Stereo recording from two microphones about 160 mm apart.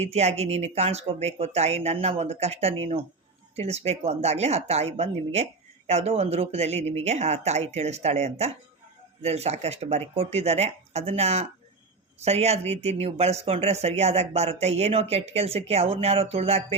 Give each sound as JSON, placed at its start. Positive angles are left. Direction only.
{"t": 0.0, "sound": "speech", "side_deg": -40}